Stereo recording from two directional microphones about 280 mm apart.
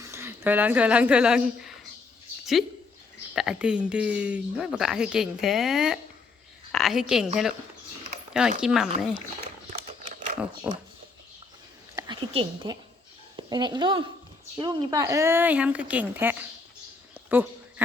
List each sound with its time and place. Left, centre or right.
0.0 s a woman's voice: centre
3.3 s a woman's voice: centre
8.3 s speech: centre
9.6 s typewriter: right
10.7 s speech: centre
11.9 s a woman's voice: centre
17.2 s a sound: centre